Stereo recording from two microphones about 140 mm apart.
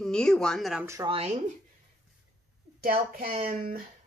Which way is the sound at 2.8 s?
90° right.